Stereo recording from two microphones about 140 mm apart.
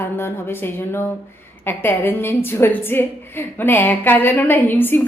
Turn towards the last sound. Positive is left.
turn(degrees=15)  # may be behind; listen again after turning